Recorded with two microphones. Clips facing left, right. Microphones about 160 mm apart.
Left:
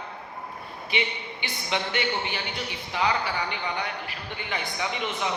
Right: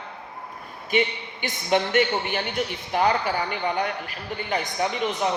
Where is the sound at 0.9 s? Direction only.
45° right (ahead or behind).